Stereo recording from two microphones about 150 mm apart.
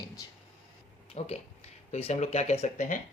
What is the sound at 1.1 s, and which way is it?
Speech, 45° left (ahead or behind).